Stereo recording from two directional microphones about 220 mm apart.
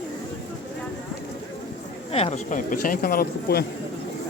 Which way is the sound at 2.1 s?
25° left (ahead or behind).